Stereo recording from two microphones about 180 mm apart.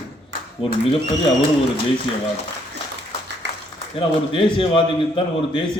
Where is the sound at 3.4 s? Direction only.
75° right (ahead or behind).